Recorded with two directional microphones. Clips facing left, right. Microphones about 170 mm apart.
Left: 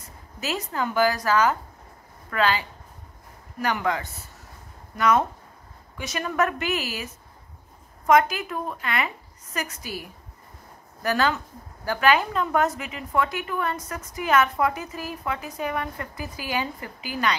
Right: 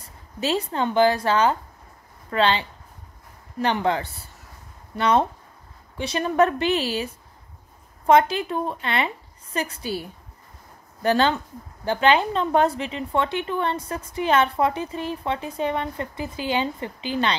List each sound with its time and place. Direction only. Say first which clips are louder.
0.0 s speech: right 6 dB; 30° right (ahead or behind)